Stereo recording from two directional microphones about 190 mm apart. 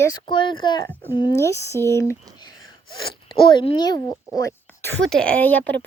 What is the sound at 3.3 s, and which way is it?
Speech, 25° left (ahead or behind).